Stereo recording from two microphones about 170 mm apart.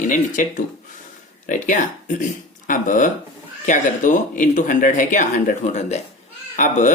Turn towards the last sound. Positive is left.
turn(degrees=45)  # may be behind; listen again after turning